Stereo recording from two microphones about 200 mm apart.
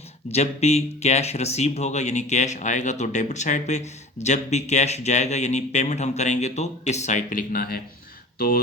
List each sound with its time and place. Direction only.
0.3 s speech: 30° left (ahead or behind)